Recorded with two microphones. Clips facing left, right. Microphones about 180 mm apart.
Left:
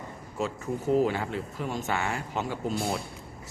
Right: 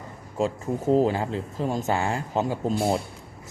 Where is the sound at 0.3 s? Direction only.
35° right (ahead or behind).